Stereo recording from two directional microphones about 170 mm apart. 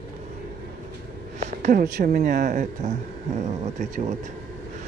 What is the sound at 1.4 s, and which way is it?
A man's voice, 50° right (ahead or behind).